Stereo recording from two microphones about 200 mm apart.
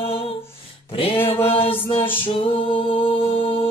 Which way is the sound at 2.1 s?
25° left (ahead or behind).